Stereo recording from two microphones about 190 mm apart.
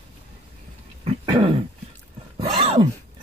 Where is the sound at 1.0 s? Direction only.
30° right (ahead or behind).